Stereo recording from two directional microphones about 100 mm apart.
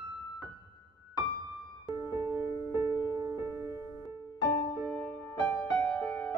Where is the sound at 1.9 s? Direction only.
35° right (ahead or behind).